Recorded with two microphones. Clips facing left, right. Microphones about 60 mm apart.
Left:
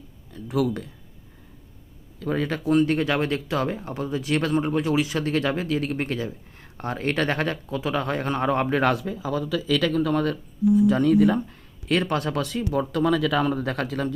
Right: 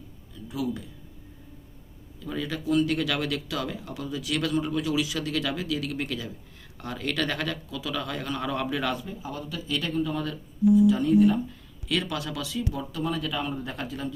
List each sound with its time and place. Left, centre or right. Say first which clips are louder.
0.3 s speech: left 7 dB; left
2.1 s speech: left 6 dB; left
8.8 s speech: left 7 dB; left
10.8 s speech: left 2 dB; left
11.9 s speech: left 6 dB; left
13.0 s speech: left 8 dB; left